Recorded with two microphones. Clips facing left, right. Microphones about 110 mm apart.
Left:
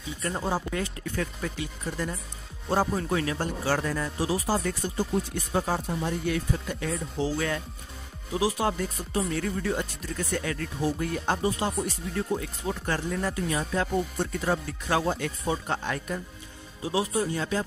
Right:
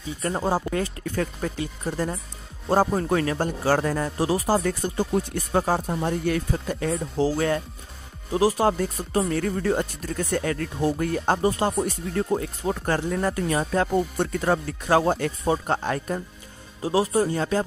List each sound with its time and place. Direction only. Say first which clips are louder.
0.2 s speech: right 5 dB; 35° right (ahead or behind)